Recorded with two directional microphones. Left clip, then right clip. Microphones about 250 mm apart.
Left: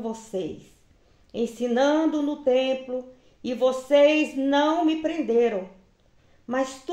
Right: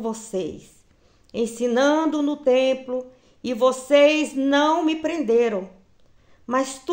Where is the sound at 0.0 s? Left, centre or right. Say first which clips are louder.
Right 3 dB; right.